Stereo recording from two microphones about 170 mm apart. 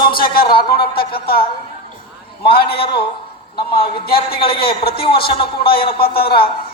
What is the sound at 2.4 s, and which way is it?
A man's voice, 65° left (ahead or behind).